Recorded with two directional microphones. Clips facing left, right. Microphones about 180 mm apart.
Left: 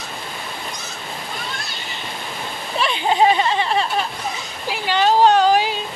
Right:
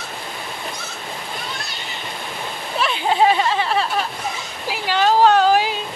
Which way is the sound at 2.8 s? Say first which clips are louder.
Even; 5° right (ahead or behind).